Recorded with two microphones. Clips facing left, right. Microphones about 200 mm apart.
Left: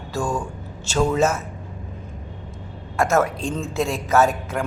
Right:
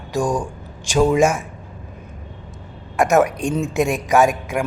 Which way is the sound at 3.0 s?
15° right (ahead or behind).